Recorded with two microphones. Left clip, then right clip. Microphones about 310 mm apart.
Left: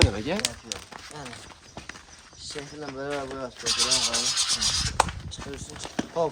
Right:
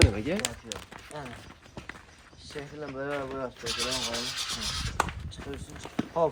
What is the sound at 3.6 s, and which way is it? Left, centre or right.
Rub, left.